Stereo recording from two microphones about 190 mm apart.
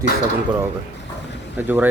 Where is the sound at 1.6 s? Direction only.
10° right (ahead or behind).